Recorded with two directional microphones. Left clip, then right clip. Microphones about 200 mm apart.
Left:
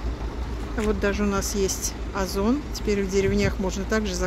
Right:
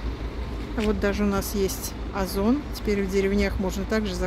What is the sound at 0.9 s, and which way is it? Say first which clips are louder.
Speech: left 1 dB; 10° right (ahead or behind).